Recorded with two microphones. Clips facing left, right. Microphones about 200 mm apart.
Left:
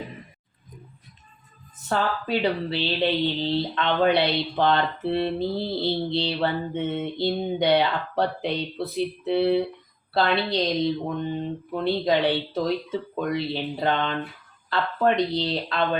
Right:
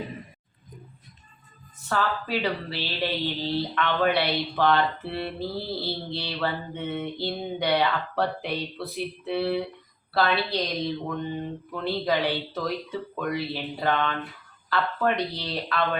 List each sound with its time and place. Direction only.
1.9 s speech: 25° left (ahead or behind)